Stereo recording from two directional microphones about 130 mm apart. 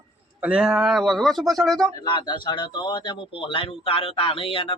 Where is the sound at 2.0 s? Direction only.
35° left (ahead or behind).